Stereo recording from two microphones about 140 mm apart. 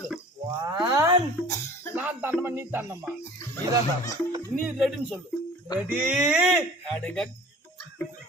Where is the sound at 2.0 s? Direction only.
10° right (ahead or behind).